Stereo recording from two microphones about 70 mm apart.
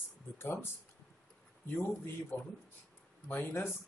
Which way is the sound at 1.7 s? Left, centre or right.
Left.